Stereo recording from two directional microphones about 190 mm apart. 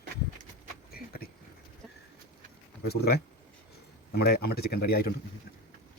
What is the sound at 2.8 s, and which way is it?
Speech, 55° left (ahead or behind).